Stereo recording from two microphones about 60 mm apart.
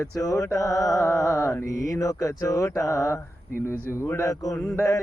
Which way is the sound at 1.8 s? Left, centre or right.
Left.